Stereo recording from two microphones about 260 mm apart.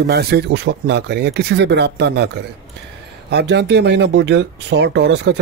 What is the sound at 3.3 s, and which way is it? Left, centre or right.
Speech, right.